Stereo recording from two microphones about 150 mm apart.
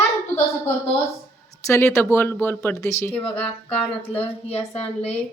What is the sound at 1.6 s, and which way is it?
Speech, 20° left (ahead or behind).